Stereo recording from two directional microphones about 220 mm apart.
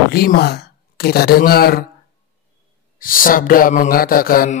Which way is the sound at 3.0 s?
40° left (ahead or behind).